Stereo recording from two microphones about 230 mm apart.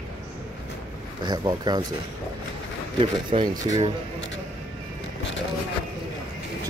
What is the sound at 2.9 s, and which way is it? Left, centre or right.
Speech, right.